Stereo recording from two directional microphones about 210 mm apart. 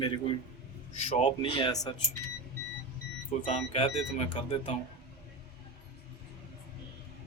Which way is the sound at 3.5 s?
30° left (ahead or behind).